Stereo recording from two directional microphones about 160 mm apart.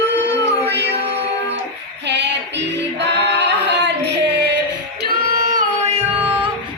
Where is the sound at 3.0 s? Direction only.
90° right.